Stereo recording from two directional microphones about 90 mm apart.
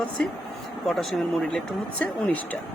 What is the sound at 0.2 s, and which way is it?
Speech, 10° left (ahead or behind).